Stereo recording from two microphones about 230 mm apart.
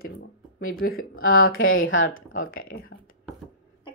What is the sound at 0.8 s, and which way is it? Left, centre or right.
Speech, left.